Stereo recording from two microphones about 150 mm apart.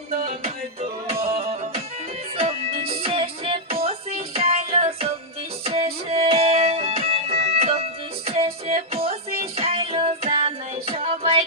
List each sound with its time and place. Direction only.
1.0 s music: 40° right (ahead or behind)